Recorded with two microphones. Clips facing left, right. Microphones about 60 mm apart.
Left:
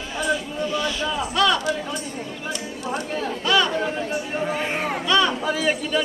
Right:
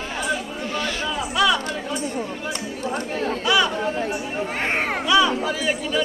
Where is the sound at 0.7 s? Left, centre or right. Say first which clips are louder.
Even; right.